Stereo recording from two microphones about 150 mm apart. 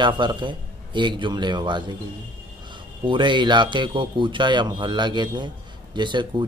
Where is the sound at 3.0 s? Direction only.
30° right (ahead or behind).